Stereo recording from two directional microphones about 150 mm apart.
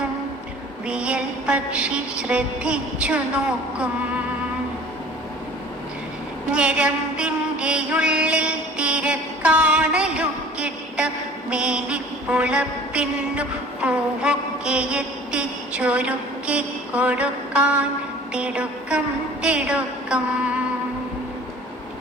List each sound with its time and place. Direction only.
0.9 s music: 5° right (ahead or behind)
6.5 s a sound: 5° right (ahead or behind)
18.3 s music: 5° right (ahead or behind)